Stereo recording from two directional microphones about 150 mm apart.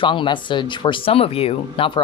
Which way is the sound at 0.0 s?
30° left (ahead or behind).